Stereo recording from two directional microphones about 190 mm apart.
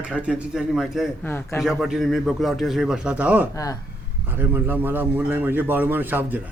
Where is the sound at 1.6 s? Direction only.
Centre (ahead or behind).